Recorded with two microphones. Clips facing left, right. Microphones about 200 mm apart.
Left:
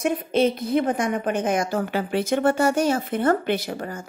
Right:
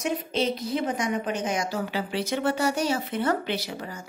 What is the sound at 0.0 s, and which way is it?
A woman's voice, 55° left (ahead or behind).